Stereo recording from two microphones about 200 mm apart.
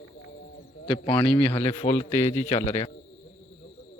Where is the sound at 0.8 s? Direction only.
20° left (ahead or behind).